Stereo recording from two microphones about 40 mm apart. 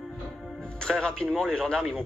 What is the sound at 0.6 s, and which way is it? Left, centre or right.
Speech, centre.